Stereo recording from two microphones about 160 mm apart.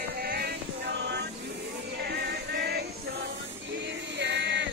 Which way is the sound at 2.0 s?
90° right.